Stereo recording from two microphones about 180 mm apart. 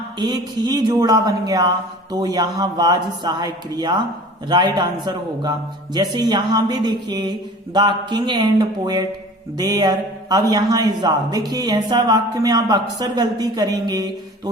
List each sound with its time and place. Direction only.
0.2 s speech: 25° right (ahead or behind)